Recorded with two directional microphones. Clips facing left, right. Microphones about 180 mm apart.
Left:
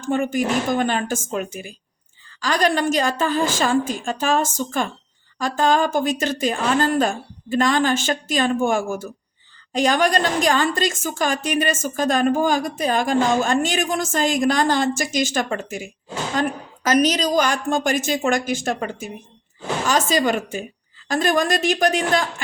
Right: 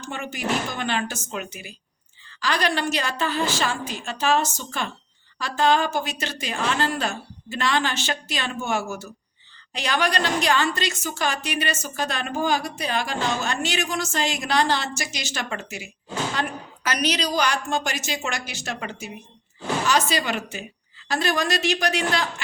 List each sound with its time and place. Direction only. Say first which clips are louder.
0.1 s a woman's voice: left 7 dB; 45° left (ahead or behind)